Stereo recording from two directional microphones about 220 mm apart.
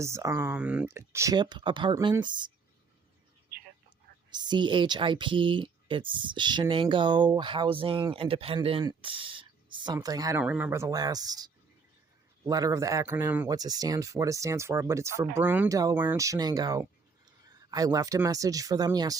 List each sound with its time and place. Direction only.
0.0 s speech: 15° right (ahead or behind)
3.8 s speech: 20° right (ahead or behind)